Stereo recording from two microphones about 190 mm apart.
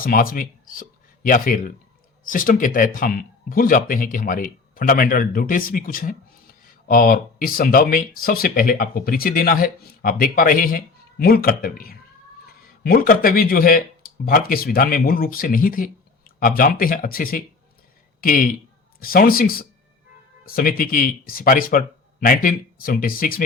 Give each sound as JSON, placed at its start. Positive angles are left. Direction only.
{"t": 0.0, "sound": "speech", "side_deg": 50}